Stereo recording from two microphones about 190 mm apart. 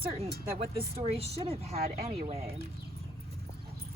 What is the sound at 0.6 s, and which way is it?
Speech, 30° right (ahead or behind).